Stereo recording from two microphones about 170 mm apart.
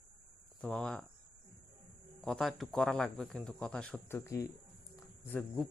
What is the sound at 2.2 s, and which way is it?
Speech, centre (ahead or behind).